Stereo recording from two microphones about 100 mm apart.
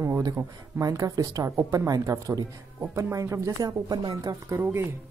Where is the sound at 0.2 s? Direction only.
35° right (ahead or behind).